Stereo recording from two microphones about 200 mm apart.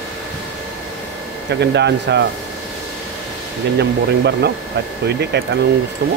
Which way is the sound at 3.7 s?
55° right (ahead or behind).